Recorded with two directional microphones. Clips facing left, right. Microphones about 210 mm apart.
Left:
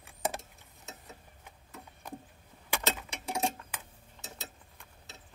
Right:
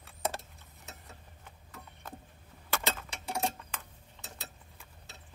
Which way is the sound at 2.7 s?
15° left (ahead or behind).